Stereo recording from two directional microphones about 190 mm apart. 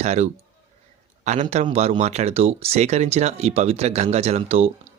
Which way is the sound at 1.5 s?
35° right (ahead or behind).